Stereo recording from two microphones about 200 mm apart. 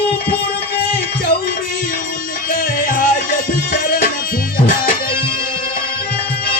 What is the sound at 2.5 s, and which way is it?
Music, 45° left (ahead or behind).